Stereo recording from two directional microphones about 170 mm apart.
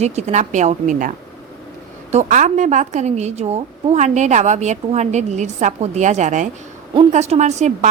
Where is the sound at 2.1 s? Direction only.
45° right (ahead or behind).